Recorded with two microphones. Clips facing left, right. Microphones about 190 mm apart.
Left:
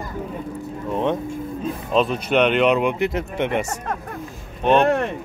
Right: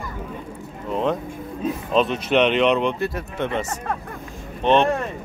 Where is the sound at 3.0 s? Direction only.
20° left (ahead or behind).